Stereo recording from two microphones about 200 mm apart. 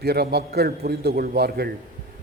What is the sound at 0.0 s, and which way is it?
A man's voice, 50° right (ahead or behind).